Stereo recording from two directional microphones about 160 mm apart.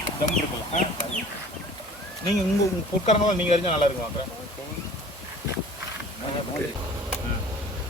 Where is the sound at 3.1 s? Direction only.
40° left (ahead or behind).